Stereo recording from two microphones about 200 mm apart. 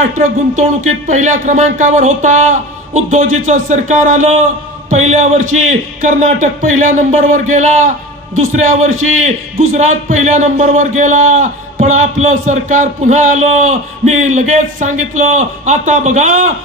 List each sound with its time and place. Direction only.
0.0 s a man's voice: 40° right (ahead or behind)
8.9 s a man's voice: 90° right
9.2 s a man's voice: 35° right (ahead or behind)